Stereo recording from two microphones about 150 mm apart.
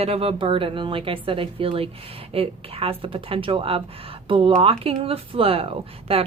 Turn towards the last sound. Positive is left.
turn(degrees=-40)  # may be behind; listen again after turning